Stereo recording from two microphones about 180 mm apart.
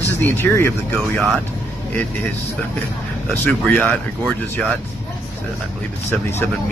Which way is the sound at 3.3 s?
5° left (ahead or behind).